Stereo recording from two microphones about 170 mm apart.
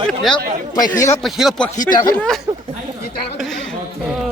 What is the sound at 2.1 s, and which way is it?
Speech, centre (ahead or behind).